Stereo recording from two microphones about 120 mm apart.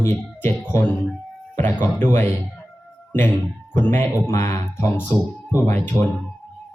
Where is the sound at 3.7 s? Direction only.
20° left (ahead or behind).